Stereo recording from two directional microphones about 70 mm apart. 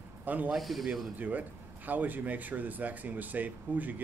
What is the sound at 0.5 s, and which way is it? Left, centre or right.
Speech, centre.